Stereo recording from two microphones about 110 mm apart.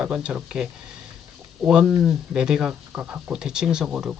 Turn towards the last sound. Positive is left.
turn(degrees=-10)  # may be behind; listen again after turning